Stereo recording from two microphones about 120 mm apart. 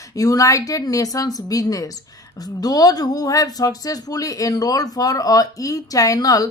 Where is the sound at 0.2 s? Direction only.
30° left (ahead or behind).